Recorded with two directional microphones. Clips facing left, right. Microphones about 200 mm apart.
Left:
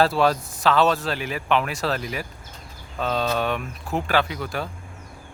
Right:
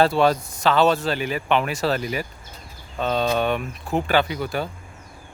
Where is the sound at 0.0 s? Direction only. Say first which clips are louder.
Right 2 dB; centre (ahead or behind).